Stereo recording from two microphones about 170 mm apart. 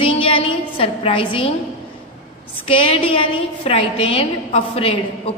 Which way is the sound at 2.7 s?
30° left (ahead or behind).